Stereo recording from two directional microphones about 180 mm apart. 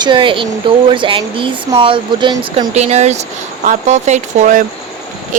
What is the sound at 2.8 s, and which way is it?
Speech, 40° right (ahead or behind).